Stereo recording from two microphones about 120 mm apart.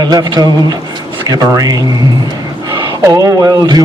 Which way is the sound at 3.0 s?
25° right (ahead or behind).